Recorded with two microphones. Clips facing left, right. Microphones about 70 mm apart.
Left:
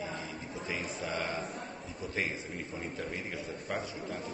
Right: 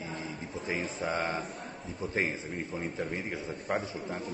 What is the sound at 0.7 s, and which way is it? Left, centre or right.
Speech, right.